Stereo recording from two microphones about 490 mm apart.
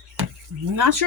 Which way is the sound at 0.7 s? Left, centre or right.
Right.